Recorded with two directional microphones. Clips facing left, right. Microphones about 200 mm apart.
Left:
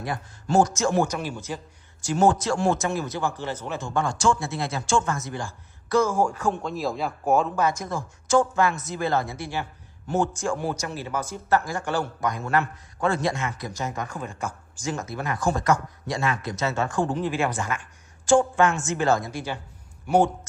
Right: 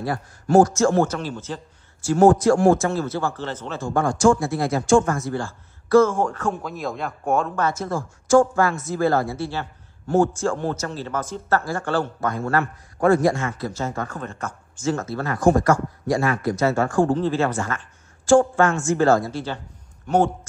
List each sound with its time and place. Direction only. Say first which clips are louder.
0.0 s speech: right 5 dB; 20° left (ahead or behind)
4.4 s speech: right 7 dB; 25° left (ahead or behind)
6.5 s speech: left 1 dB; centre (ahead or behind); by 15.3 s 15° left (ahead or behind)
15.3 s speech: right 9 dB; 50° right (ahead or behind)
15.6 s speech: right 3 dB; 20° left (ahead or behind)